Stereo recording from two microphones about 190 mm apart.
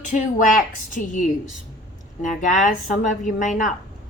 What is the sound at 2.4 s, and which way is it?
Speech, 40° left (ahead or behind).